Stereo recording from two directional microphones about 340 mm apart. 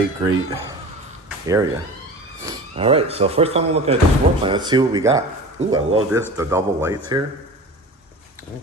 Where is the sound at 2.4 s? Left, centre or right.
Centre.